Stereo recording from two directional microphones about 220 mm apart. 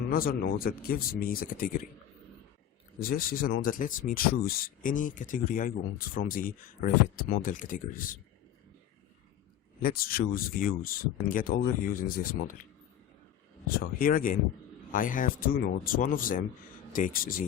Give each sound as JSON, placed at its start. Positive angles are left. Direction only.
{"t": 0.1, "sound": "speech", "side_deg": 40}
{"t": 3.0, "sound": "speech", "side_deg": 40}
{"t": 9.8, "sound": "speech", "side_deg": 40}
{"t": 13.7, "sound": "speech", "side_deg": 40}